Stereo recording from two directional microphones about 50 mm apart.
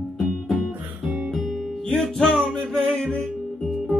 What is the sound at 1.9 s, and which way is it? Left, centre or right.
Music, centre.